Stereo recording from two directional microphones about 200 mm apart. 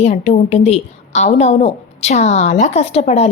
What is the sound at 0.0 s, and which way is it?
A woman's voice, 35° left (ahead or behind).